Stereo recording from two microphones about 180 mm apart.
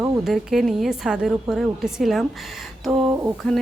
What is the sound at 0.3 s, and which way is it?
Speech, centre (ahead or behind).